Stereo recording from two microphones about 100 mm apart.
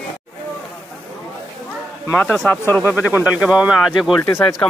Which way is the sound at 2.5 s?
20° left (ahead or behind).